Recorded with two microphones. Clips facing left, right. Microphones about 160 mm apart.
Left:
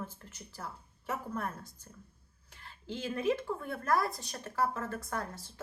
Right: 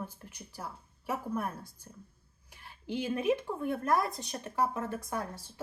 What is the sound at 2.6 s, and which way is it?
Speech, 15° right (ahead or behind).